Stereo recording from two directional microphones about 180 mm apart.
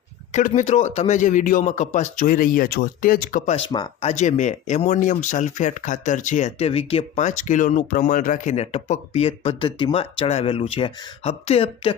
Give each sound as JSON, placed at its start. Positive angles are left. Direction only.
{"t": 0.3, "sound": "a man's voice", "side_deg": 45}
{"t": 3.7, "sound": "speech", "side_deg": 25}
{"t": 4.1, "sound": "speech", "side_deg": 40}